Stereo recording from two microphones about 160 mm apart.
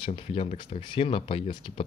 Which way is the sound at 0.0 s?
35° left (ahead or behind).